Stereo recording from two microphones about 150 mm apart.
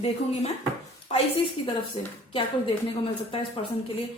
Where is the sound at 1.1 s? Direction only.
45° left (ahead or behind).